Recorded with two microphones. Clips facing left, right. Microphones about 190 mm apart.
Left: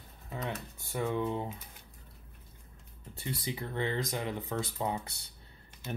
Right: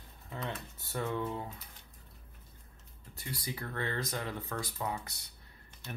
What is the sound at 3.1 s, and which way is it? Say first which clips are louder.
Speech: left 4 dB; 25° left (ahead or behind).